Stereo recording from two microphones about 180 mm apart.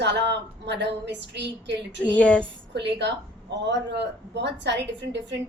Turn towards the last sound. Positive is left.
turn(degrees=-75)  # may be behind; listen again after turning